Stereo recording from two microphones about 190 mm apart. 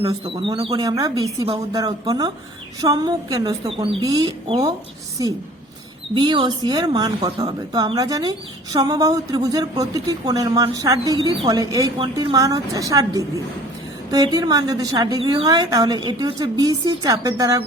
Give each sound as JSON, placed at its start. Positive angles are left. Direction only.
{"t": 0.0, "sound": "a woman's voice", "side_deg": -25}